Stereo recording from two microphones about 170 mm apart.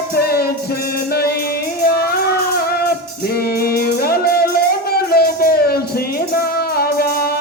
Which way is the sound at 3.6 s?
65° left (ahead or behind).